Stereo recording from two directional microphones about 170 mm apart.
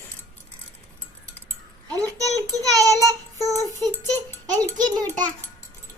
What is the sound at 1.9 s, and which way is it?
A child's voice, 20° right (ahead or behind).